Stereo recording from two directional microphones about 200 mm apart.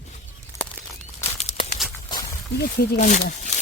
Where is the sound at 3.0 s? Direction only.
35° left (ahead or behind).